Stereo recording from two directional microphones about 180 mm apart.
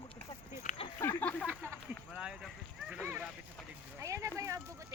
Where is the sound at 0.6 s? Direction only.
30° left (ahead or behind).